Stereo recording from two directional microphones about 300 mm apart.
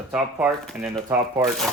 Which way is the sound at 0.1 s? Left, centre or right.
Centre.